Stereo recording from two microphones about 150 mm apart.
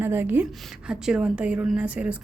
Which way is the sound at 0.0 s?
15° right (ahead or behind).